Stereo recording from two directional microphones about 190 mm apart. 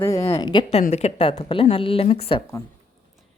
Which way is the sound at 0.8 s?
35° left (ahead or behind).